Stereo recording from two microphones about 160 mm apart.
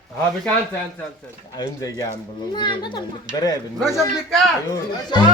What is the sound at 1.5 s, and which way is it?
Speech, 20° left (ahead or behind).